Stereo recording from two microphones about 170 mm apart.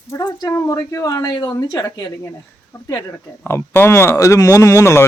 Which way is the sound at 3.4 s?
15° left (ahead or behind).